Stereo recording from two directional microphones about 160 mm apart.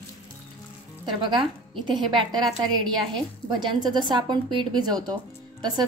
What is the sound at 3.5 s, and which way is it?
A woman's voice, 30° right (ahead or behind).